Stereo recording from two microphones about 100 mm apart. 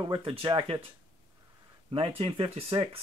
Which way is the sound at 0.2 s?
65° right (ahead or behind).